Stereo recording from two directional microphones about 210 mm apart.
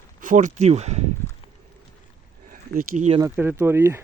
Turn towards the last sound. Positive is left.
turn(degrees=-10)  # may be behind; listen again after turning